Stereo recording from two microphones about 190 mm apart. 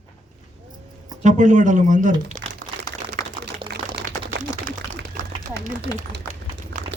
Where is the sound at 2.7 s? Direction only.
25° right (ahead or behind).